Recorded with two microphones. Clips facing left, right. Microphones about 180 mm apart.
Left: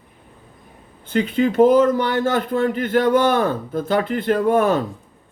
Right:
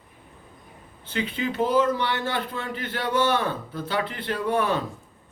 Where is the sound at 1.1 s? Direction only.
45° left (ahead or behind).